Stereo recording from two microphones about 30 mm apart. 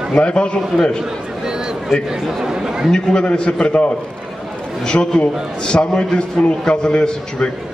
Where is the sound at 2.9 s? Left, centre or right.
Left.